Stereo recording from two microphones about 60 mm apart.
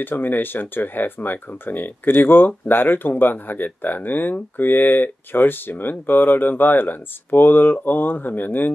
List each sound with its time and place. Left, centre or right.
0.0 s speech: left